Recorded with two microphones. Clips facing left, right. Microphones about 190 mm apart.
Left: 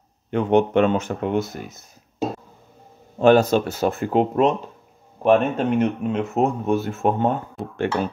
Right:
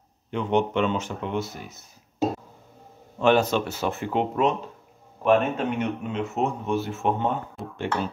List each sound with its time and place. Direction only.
0.3 s speech: 50° left (ahead or behind)
3.2 s speech: 40° left (ahead or behind)
7.7 s speech: 55° left (ahead or behind)